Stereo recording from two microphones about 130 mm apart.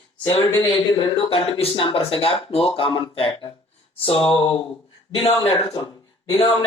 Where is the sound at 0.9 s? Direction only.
40° left (ahead or behind).